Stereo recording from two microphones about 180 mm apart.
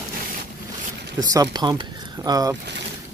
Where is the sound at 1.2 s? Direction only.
20° right (ahead or behind).